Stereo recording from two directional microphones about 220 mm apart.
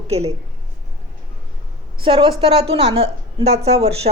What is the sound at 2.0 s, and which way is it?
A woman's voice, 20° right (ahead or behind).